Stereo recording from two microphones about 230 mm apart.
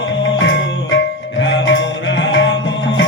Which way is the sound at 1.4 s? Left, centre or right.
Left.